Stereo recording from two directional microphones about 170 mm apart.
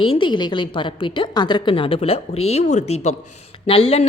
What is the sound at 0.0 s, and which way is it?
A woman's voice, 30° left (ahead or behind).